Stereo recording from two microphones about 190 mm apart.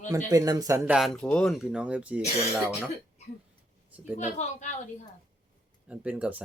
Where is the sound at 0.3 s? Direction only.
20° right (ahead or behind).